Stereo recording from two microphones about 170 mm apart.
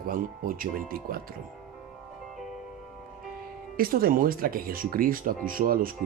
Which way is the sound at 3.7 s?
60° right (ahead or behind).